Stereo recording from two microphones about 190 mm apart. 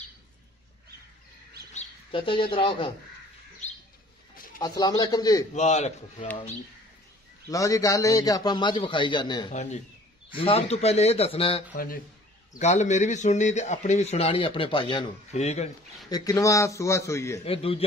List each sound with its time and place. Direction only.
1.7 s bird: 30° left (ahead or behind)
2.5 s a man's voice: 30° left (ahead or behind)
4.6 s a man's voice: 20° left (ahead or behind)
5.5 s a man's voice: 35° left (ahead or behind)
7.4 s a man's voice: 15° left (ahead or behind)
9.5 s a man's voice: 40° left (ahead or behind)
11.7 s a man's voice: 50° left (ahead or behind)
16.1 s a man's voice: 20° left (ahead or behind)
17.5 s a man's voice: 30° left (ahead or behind)